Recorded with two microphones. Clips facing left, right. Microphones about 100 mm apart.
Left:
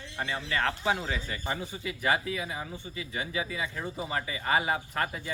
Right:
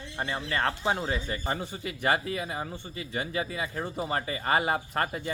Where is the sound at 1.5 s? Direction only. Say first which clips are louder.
Right 1 dB; 50° right (ahead or behind).